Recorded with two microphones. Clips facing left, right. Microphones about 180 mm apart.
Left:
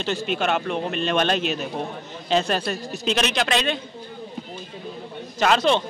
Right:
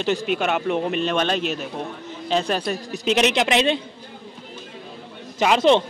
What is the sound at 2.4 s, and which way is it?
Speech, 15° right (ahead or behind).